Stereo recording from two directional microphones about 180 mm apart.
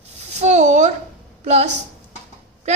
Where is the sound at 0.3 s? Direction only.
40° right (ahead or behind).